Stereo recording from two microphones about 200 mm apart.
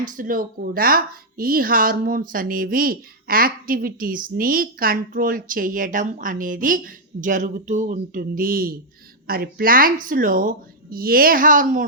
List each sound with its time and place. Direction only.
0.1 s speech: 45° right (ahead or behind)